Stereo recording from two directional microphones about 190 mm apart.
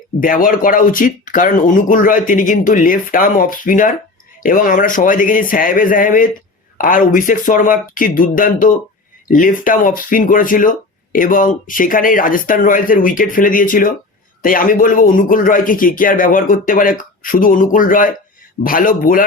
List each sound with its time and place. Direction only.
0.2 s speech: 45° left (ahead or behind)